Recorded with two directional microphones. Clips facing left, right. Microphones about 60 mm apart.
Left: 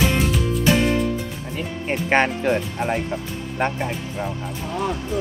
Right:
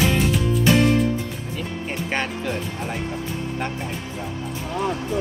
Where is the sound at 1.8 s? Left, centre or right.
Left.